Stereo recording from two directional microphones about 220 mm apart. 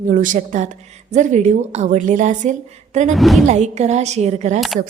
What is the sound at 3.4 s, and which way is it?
A woman's voice, 30° right (ahead or behind).